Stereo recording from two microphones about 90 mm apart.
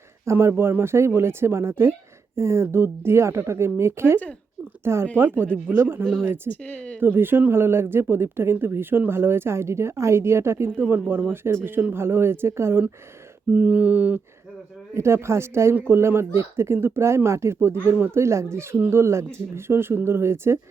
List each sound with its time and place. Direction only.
0.3 s speech: 30° right (ahead or behind)
6.5 s speech: 15° left (ahead or behind)
7.0 s speech: 25° right (ahead or behind)
13.5 s mantra: 20° right (ahead or behind)
14.9 s speech: 30° right (ahead or behind)